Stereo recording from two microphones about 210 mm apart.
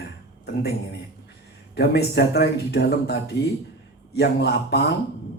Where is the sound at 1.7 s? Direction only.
50° left (ahead or behind).